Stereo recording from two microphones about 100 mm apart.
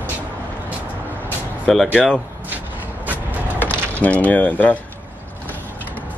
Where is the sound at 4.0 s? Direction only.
15° left (ahead or behind).